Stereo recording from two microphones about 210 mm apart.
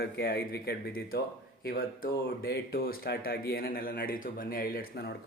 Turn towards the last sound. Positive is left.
turn(degrees=45)  # may be behind; listen again after turning